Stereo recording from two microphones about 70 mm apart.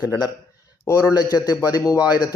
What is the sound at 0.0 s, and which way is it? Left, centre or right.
A man's voice, left.